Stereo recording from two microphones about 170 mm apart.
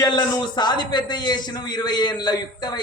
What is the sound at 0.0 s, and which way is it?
A man's voice, 25° left (ahead or behind).